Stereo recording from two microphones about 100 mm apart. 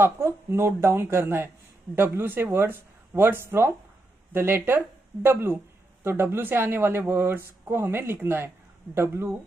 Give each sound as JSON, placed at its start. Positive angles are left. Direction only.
{"t": 0.0, "sound": "speech", "side_deg": -25}